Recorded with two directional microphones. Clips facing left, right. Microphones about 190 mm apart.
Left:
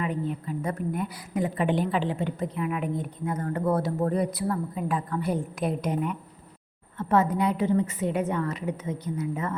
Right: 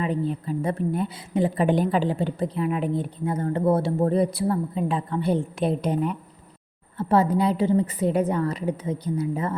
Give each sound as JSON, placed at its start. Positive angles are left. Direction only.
{"t": 0.0, "sound": "a woman's voice", "side_deg": -30}